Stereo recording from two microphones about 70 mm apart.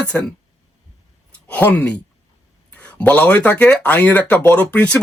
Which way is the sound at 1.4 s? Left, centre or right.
Left.